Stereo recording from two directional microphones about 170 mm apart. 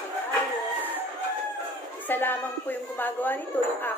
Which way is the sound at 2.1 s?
10° left (ahead or behind).